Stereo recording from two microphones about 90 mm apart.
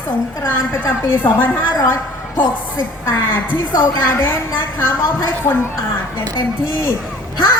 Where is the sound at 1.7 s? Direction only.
40° left (ahead or behind).